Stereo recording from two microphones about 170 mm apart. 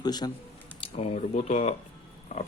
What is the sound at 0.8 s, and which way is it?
Speech, 35° left (ahead or behind).